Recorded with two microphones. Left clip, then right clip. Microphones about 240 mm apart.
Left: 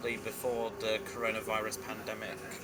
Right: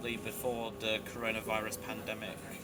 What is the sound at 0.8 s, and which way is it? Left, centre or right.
Speech, centre.